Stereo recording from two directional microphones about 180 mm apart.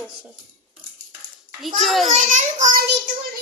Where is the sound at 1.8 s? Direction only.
Centre (ahead or behind).